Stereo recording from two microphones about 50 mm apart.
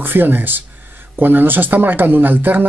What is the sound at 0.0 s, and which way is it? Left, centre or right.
Speech, right.